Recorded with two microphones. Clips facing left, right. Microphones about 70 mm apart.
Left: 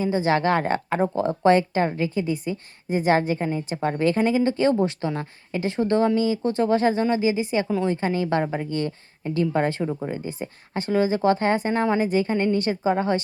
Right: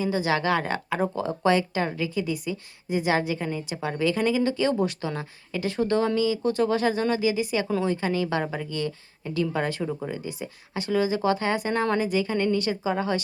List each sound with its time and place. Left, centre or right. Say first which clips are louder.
0.0 s speech: left 3 dB; left
9.8 s speech: left 3 dB; centre
10.1 s speech: left 3 dB; left